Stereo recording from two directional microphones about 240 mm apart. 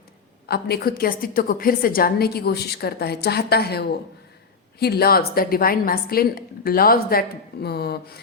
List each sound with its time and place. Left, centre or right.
0.4 s a woman's voice: left